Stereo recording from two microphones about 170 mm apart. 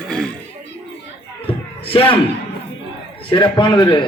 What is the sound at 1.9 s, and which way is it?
Speech, 30° left (ahead or behind).